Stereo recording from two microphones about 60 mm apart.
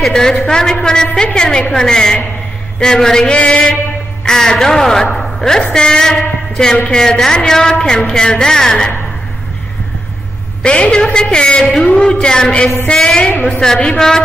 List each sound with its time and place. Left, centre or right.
0.0 s a woman's voice: centre
10.6 s a woman's voice: centre